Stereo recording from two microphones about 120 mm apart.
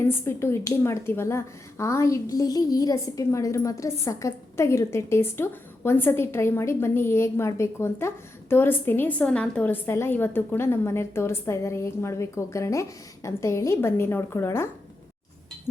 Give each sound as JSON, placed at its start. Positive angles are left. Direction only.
{"t": 0.0, "sound": "a woman's voice", "side_deg": 20}